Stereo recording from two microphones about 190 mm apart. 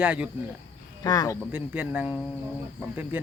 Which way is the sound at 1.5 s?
5° right (ahead or behind).